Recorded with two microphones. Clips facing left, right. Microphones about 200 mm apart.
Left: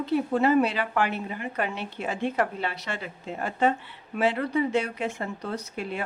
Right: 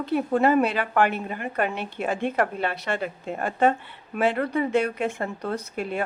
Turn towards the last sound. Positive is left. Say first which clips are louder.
# right 3 dB
turn(degrees=-50)  # may be behind; listen again after turning